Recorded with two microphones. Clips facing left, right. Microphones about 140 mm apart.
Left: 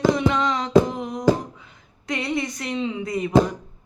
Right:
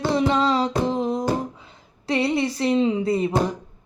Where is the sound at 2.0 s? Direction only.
30° right (ahead or behind).